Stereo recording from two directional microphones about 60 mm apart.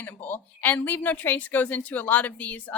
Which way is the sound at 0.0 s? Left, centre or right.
Left.